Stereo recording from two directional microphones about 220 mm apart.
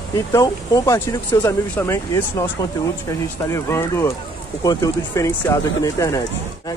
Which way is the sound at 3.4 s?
10° left (ahead or behind).